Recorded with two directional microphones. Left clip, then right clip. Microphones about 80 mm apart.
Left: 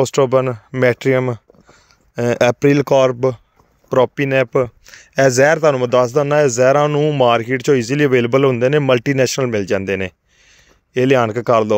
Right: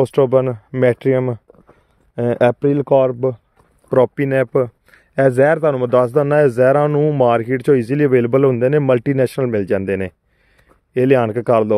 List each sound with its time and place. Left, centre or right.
0.0 s speech: right
2.6 s speech: centre
3.0 s speech: centre
3.9 s speech: right
4.2 s speech: right
5.4 s speech: centre
5.9 s speech: right
6.2 s speech: right
10.9 s speech: right